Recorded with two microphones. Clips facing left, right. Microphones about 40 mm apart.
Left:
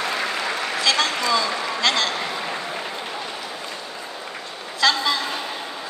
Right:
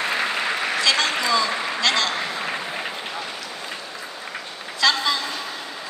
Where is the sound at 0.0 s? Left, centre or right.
Right.